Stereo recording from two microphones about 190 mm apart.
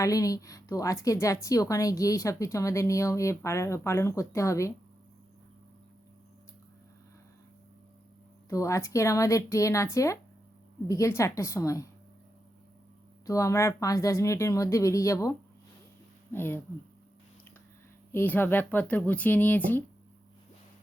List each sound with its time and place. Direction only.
0.0 s a woman's voice: 15° left (ahead or behind)
8.4 s a woman's voice: 15° left (ahead or behind)
13.2 s a woman's voice: 15° left (ahead or behind)
16.3 s a woman's voice: 10° left (ahead or behind)
18.1 s a woman's voice: 10° left (ahead or behind)